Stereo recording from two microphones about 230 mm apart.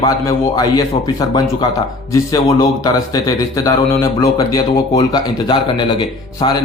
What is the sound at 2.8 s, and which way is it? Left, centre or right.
A man's voice, centre.